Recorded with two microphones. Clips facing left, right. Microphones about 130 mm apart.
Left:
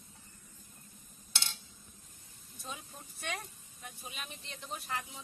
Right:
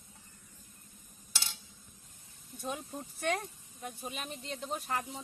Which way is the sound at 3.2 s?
45° right (ahead or behind).